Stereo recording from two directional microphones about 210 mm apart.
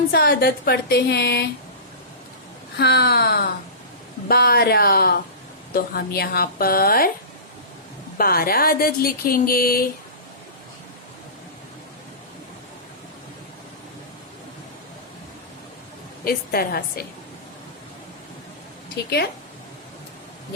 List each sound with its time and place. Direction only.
0.1 s speech: 45° left (ahead or behind)
2.7 s speech: 50° left (ahead or behind)
8.2 s speech: 45° left (ahead or behind)
16.2 s speech: 45° left (ahead or behind)
18.9 s speech: 50° left (ahead or behind)